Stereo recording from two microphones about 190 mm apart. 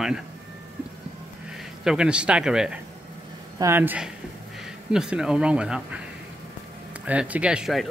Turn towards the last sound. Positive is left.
turn(degrees=0)  # may be behind; listen again after turning